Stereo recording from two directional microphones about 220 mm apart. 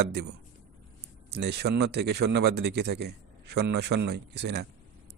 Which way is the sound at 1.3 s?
50° right (ahead or behind).